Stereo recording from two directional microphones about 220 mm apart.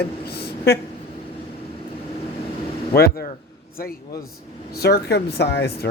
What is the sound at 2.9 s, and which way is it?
Speech, 45° left (ahead or behind).